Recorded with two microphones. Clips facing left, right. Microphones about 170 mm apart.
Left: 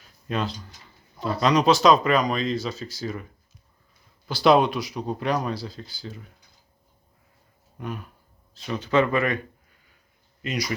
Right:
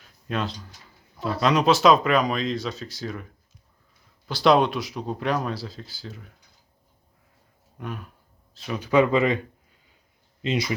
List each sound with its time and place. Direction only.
0.0 s a sound: centre (ahead or behind)
1.2 s speech: centre (ahead or behind)
4.3 s speech: centre (ahead or behind)
7.8 s speech: centre (ahead or behind); by 9.4 s 20° right (ahead or behind)
10.4 s speech: 25° right (ahead or behind)